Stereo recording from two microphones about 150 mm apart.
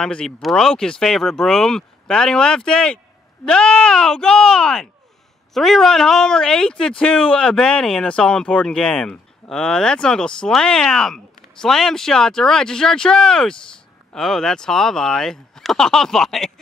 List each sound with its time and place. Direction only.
0.0 s speech: 5° left (ahead or behind)